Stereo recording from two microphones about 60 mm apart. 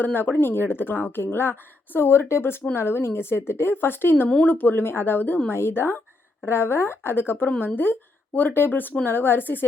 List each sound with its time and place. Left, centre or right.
0.0 s a woman's voice: left